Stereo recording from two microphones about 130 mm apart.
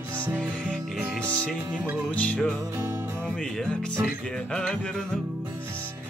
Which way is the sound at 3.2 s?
5° left (ahead or behind).